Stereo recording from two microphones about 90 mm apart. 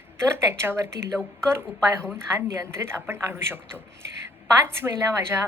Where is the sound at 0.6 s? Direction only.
30° right (ahead or behind).